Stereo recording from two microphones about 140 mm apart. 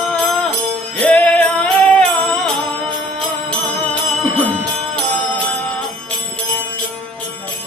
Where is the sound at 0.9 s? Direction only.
10° left (ahead or behind).